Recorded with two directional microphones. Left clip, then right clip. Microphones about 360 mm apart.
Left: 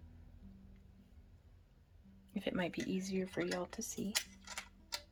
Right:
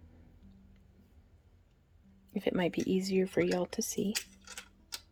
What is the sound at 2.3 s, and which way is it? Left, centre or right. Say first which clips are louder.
Speech: right 7 dB; centre.